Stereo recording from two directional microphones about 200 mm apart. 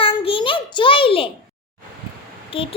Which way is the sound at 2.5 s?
25° left (ahead or behind).